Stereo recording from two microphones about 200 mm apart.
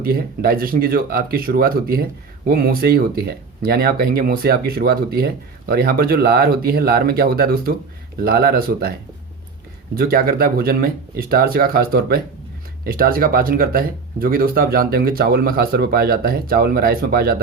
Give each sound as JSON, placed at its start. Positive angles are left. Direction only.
{"t": 0.0, "sound": "speech", "side_deg": -50}